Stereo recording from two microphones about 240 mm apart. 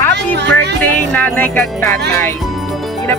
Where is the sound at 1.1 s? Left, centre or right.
Centre.